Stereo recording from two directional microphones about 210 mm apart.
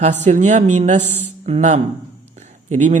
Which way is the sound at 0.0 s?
35° right (ahead or behind).